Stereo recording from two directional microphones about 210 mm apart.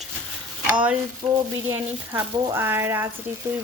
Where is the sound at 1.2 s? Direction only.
20° right (ahead or behind).